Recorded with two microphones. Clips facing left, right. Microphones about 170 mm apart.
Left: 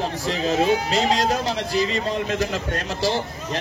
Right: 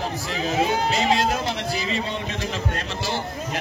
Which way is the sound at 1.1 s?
40° left (ahead or behind).